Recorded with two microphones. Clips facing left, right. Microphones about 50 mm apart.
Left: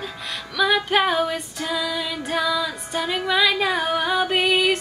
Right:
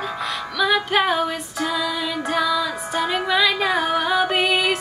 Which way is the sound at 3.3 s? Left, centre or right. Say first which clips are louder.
Left 1 dB; centre.